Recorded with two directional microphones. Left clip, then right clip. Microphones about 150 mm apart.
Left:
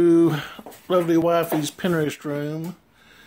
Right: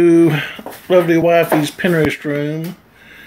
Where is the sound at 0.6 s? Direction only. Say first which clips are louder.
Right 10 dB; 40° left (ahead or behind).